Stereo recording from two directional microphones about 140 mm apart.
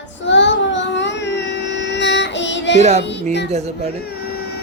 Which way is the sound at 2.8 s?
50° right (ahead or behind).